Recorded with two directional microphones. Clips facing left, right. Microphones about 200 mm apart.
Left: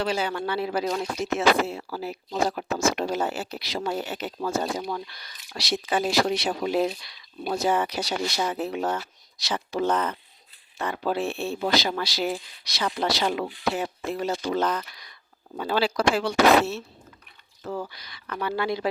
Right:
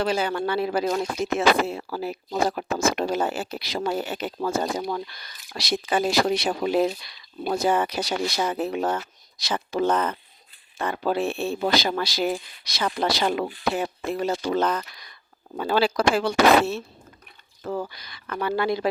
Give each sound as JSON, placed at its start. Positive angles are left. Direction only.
{"t": 0.0, "sound": "speech", "side_deg": -50}